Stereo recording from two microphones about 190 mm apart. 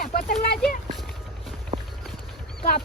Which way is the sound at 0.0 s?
50° left (ahead or behind).